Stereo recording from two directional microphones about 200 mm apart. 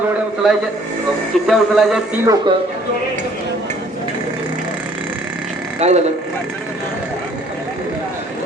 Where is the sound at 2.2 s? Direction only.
20° right (ahead or behind).